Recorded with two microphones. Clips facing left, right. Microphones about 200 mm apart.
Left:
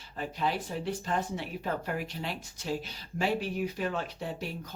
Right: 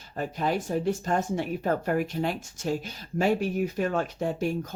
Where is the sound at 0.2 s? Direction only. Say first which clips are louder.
Right 4 dB; 45° right (ahead or behind).